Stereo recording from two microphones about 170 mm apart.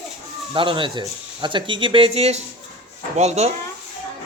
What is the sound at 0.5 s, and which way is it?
Speech, 30° right (ahead or behind).